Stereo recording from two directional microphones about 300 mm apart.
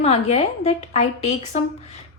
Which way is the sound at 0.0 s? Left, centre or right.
Left.